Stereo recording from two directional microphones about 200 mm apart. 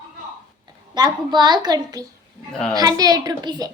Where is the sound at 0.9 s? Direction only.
20° right (ahead or behind).